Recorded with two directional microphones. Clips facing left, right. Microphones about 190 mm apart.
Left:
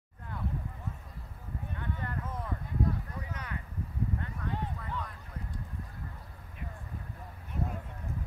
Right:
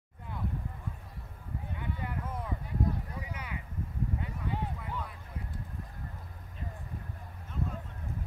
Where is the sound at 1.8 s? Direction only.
10° right (ahead or behind).